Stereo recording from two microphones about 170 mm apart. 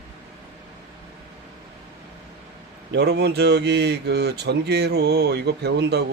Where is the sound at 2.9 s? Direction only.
80° right.